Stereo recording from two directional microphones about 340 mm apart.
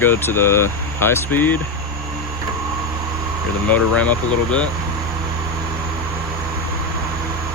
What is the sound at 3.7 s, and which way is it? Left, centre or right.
Speech, centre.